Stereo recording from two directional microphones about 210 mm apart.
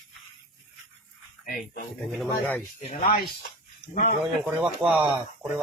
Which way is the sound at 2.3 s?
10° left (ahead or behind).